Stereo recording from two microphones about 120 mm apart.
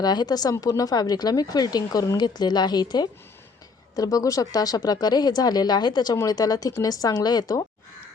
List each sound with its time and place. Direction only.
0.0 s speech: 35° left (ahead or behind)